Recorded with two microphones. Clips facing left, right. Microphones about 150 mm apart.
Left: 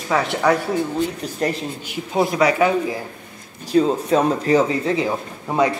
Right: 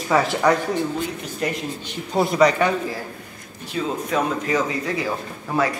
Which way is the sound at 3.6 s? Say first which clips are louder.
Left 8 dB; 35° left (ahead or behind).